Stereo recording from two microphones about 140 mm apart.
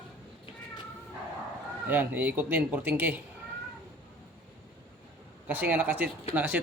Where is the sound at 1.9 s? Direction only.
10° right (ahead or behind).